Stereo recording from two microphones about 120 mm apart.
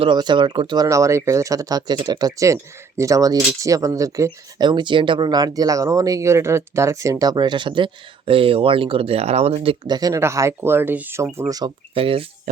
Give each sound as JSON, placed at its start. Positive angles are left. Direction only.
{"t": 0.0, "sound": "speech", "side_deg": -40}
{"t": 0.9, "sound": "speech", "side_deg": -25}
{"t": 9.8, "sound": "speech", "side_deg": -35}
{"t": 10.2, "sound": "speech", "side_deg": -25}
{"t": 11.9, "sound": "speech", "side_deg": -50}